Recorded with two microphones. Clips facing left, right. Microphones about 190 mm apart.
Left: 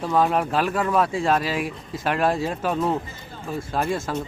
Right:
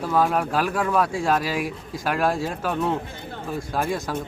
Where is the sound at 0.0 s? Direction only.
Centre (ahead or behind).